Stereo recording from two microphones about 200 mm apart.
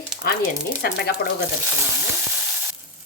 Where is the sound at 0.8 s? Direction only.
50° left (ahead or behind).